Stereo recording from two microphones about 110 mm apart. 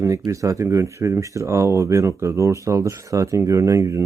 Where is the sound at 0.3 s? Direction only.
30° right (ahead or behind).